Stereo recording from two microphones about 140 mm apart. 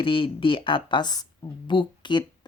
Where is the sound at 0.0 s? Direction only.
40° left (ahead or behind).